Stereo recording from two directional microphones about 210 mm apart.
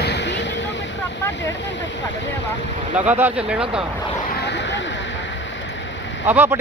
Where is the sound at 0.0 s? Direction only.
55° left (ahead or behind).